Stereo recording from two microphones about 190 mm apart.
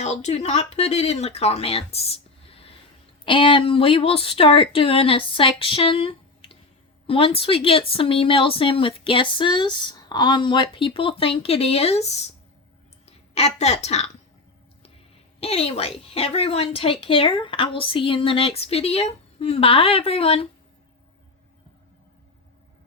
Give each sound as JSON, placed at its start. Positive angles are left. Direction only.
{"t": 0.0, "sound": "a woman's voice", "side_deg": 35}
{"t": 13.3, "sound": "a woman's voice", "side_deg": 35}
{"t": 15.4, "sound": "a woman's voice", "side_deg": 30}